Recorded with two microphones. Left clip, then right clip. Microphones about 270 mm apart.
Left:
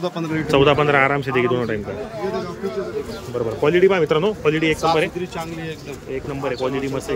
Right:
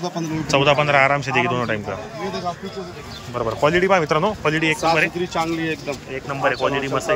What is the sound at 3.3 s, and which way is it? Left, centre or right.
Speech, centre.